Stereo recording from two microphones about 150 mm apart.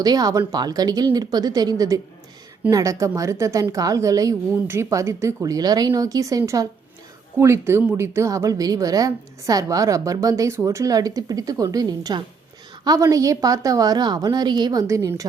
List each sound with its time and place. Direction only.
0.0 s a woman's voice: 25° right (ahead or behind)